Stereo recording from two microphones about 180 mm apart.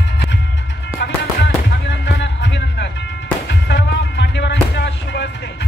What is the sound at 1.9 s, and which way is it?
Music, 75° left (ahead or behind).